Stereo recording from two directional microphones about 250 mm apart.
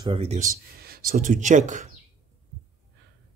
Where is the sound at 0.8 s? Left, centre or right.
Right.